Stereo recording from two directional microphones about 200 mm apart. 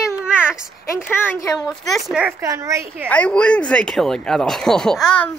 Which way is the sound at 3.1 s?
5° left (ahead or behind).